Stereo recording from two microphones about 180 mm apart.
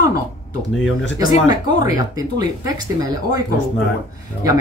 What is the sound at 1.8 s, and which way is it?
Speech, 20° right (ahead or behind).